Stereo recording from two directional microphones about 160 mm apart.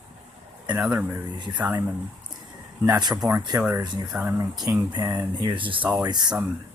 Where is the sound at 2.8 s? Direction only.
25° right (ahead or behind).